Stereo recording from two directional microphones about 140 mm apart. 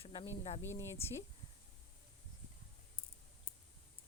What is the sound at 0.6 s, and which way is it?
Speech, 15° left (ahead or behind).